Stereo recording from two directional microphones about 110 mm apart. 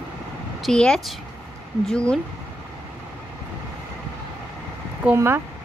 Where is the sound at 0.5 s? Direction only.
5° left (ahead or behind).